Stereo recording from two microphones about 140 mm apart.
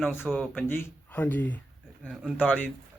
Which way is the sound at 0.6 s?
15° left (ahead or behind).